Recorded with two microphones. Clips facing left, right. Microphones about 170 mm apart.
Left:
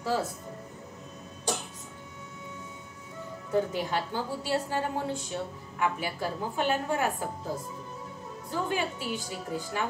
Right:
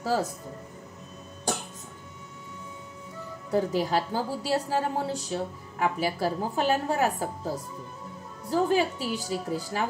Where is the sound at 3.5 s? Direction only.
35° right (ahead or behind).